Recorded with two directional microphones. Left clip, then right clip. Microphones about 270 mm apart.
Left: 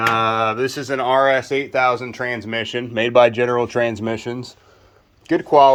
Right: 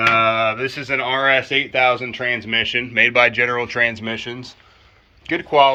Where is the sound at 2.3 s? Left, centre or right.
Left.